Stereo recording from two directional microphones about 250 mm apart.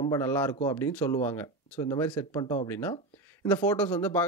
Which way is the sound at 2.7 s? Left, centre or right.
Centre.